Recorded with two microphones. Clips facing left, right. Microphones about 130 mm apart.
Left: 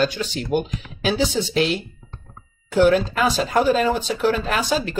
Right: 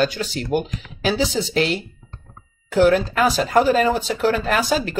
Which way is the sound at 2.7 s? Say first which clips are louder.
Right 1 dB; 45° right (ahead or behind).